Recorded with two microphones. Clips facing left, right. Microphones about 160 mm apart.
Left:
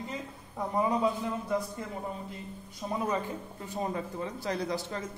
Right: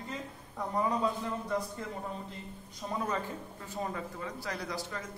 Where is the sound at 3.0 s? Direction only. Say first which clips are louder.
Left 3 dB; 15° left (ahead or behind).